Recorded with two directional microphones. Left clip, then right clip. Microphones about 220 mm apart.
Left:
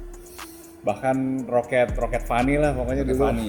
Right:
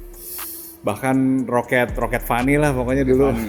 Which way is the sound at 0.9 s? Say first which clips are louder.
Right 3 dB; 50° right (ahead or behind).